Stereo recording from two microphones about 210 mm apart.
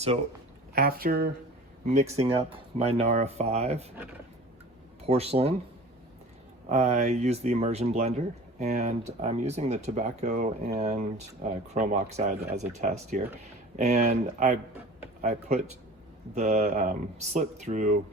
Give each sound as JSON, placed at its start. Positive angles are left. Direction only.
{"t": 0.7, "sound": "speech", "side_deg": -45}
{"t": 1.8, "sound": "speech", "side_deg": -35}
{"t": 5.0, "sound": "speech", "side_deg": -30}
{"t": 6.7, "sound": "speech", "side_deg": -30}